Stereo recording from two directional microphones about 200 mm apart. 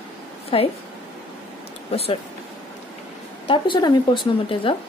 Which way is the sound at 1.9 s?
30° left (ahead or behind).